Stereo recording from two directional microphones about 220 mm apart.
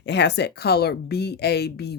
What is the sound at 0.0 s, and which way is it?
A woman's voice, 50° left (ahead or behind).